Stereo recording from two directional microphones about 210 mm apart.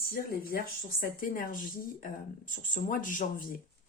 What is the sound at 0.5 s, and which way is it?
Speech, 45° left (ahead or behind).